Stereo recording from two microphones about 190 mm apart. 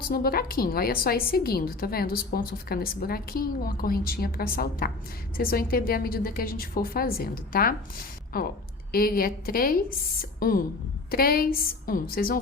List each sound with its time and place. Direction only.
0.0 s a woman's voice: 50° left (ahead or behind)